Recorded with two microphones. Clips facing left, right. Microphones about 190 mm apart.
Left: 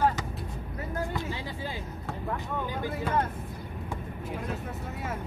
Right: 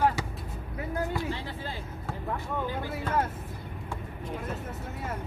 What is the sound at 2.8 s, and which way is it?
Speech, 10° left (ahead or behind).